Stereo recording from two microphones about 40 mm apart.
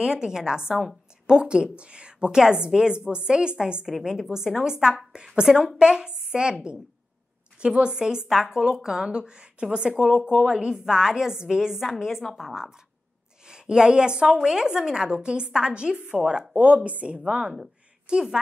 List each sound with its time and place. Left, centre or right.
0.0 s a woman's voice: centre
7.6 s speech: right; by 12.1 s centre
12.1 s a woman's voice: centre
13.5 s a woman's voice: centre
16.5 s a woman's voice: right
18.1 s speech: centre